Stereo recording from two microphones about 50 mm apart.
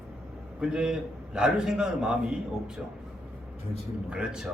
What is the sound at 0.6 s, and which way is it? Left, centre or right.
A man's voice, centre.